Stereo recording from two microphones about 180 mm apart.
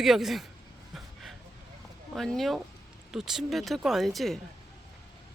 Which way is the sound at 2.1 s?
Centre (ahead or behind).